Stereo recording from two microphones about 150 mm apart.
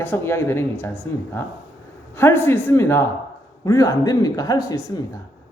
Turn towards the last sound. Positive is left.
turn(degrees=20)  # may be behind; listen again after turning